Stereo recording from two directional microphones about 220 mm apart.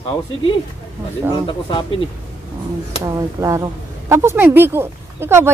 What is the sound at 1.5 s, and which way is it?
Speech, 20° left (ahead or behind).